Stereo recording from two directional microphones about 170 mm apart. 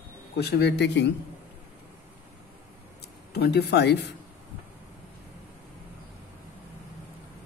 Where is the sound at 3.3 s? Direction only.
70° left (ahead or behind); by 4.1 s 90° left.